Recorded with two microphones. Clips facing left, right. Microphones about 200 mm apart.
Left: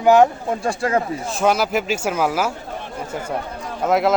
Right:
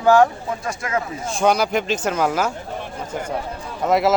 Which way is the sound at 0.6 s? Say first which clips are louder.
Left 5 dB; 35° left (ahead or behind).